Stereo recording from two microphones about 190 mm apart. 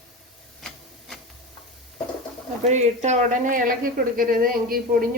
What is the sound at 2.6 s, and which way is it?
Speech, 40° right (ahead or behind).